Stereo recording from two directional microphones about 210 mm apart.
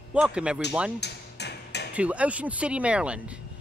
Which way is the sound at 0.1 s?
5° right (ahead or behind).